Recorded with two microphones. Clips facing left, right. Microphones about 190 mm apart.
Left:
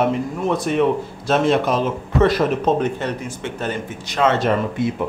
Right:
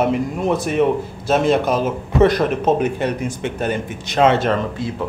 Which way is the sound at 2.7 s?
10° right (ahead or behind).